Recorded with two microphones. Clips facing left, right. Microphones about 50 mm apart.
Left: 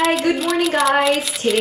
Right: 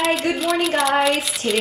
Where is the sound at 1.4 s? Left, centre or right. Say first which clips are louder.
Left 3 dB; left.